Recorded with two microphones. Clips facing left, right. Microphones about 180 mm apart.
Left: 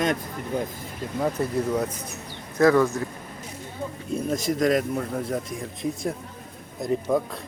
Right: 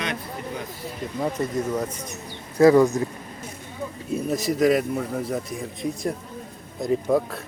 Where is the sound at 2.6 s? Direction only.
15° right (ahead or behind).